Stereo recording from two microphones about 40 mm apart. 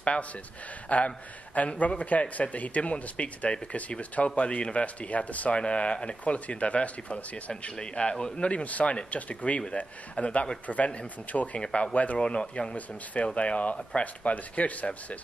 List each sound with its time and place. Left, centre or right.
0.0 s speech: left
12.7 s speech: left
14.3 s speech: left